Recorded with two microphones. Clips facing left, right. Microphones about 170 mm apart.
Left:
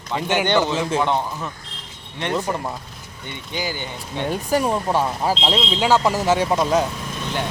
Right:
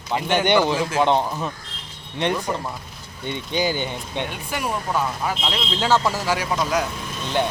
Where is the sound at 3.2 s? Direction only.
20° right (ahead or behind).